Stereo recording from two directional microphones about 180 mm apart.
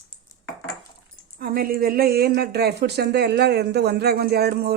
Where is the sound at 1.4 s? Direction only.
55° right (ahead or behind).